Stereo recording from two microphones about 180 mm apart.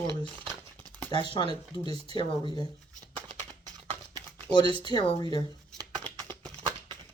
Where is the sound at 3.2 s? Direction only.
20° right (ahead or behind).